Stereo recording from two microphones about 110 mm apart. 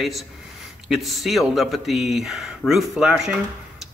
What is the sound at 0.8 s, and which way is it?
Speech, centre (ahead or behind).